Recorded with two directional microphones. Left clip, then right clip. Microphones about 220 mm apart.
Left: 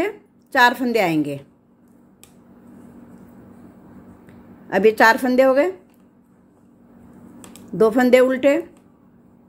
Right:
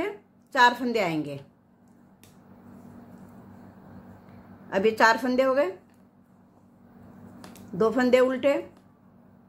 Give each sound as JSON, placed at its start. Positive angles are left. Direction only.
{"t": 0.0, "sound": "a woman's voice", "side_deg": 25}
{"t": 4.6, "sound": "a woman's voice", "side_deg": 25}
{"t": 7.7, "sound": "a woman's voice", "side_deg": 25}